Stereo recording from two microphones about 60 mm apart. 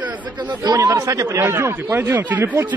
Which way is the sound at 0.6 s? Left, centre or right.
Right.